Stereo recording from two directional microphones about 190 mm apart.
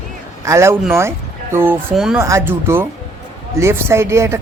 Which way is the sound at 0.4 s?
15° right (ahead or behind).